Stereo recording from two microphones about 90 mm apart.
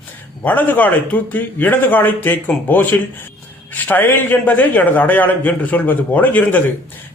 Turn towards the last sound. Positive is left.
turn(degrees=20)  # may be behind; listen again after turning